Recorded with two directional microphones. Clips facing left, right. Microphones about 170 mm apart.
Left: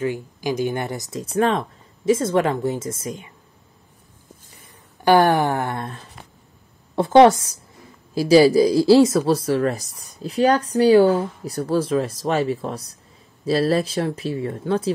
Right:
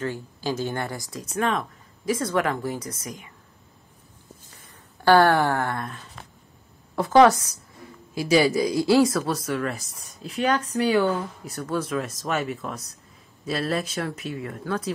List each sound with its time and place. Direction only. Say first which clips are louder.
0.0 s speech: left 5 dB; 15° left (ahead or behind)
5.0 s speech: left 2 dB; 15° left (ahead or behind)
7.0 s speech: left 4 dB; 25° left (ahead or behind)